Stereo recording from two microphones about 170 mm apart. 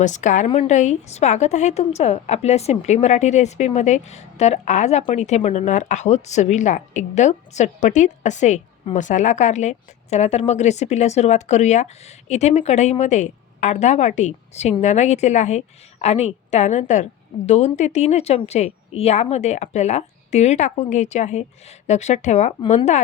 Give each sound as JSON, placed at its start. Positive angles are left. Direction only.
{"t": 0.0, "sound": "a woman's voice", "side_deg": 45}